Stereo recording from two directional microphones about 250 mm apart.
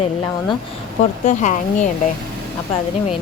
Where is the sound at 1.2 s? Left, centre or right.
Left.